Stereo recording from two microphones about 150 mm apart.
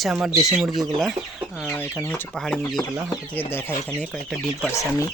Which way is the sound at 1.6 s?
15° left (ahead or behind).